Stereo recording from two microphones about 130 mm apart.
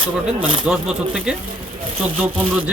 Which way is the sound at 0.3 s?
40° right (ahead or behind).